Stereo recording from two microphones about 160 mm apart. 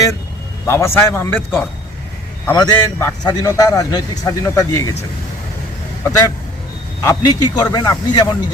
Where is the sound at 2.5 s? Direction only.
20° left (ahead or behind).